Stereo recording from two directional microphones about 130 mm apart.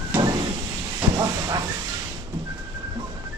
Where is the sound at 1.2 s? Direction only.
25° right (ahead or behind).